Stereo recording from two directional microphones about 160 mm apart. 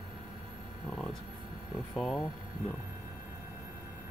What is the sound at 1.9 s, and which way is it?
Speech, centre (ahead or behind).